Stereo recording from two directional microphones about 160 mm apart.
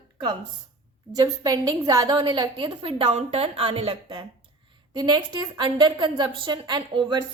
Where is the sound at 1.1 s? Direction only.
25° right (ahead or behind).